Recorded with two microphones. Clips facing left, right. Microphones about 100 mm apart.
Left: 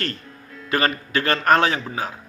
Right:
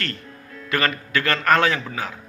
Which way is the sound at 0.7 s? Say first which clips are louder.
Left 1 dB; 30° left (ahead or behind).